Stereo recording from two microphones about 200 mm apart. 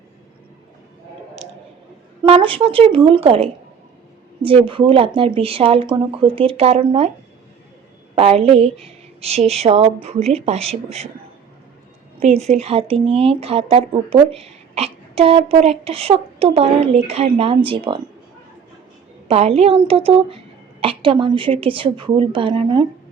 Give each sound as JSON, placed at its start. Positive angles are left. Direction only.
{"t": 2.2, "sound": "speech", "side_deg": -30}
{"t": 8.1, "sound": "speech", "side_deg": -30}
{"t": 12.2, "sound": "speech", "side_deg": -30}
{"t": 19.3, "sound": "speech", "side_deg": -30}